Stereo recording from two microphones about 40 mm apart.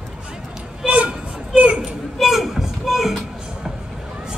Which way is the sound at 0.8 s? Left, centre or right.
Right.